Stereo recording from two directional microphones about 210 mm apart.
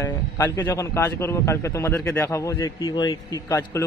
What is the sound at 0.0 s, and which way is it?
A man's voice, 15° left (ahead or behind).